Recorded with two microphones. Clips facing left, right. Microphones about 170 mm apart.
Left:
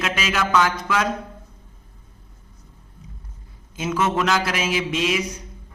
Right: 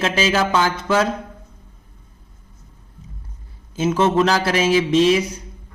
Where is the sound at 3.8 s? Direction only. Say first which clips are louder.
Right 6 dB; 30° right (ahead or behind).